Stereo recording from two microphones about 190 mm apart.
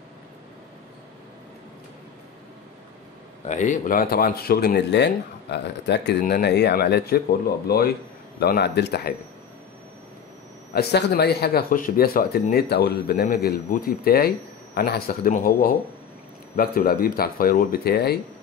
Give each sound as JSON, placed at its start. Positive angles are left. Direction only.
{"t": 3.4, "sound": "speech", "side_deg": 40}
{"t": 10.7, "sound": "speech", "side_deg": 60}